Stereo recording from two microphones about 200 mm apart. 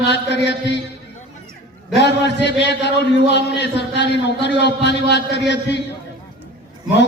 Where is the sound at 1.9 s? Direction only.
60° left (ahead or behind).